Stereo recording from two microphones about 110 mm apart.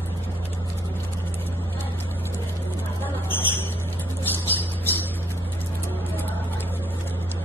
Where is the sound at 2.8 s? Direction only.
20° left (ahead or behind).